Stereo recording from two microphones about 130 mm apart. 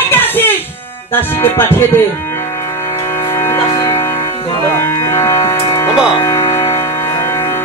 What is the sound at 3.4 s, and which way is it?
Music, 30° left (ahead or behind).